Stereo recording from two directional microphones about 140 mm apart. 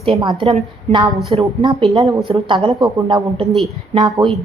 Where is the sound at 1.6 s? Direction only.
35° right (ahead or behind).